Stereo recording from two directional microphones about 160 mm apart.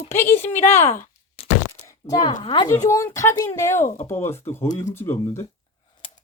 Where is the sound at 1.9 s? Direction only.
20° left (ahead or behind).